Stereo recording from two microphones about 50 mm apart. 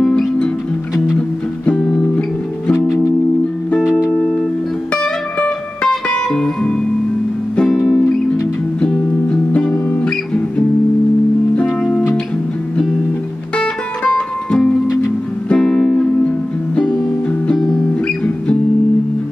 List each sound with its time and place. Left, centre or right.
0.0 s music: centre
4.1 s music: centre
4.9 s music: left
8.8 s music: left
13.6 s music: centre
18.0 s music: left